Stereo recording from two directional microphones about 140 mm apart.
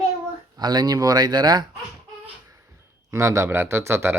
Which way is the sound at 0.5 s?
30° right (ahead or behind).